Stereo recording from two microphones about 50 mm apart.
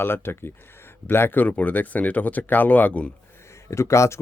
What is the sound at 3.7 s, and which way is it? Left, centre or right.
Speech, left.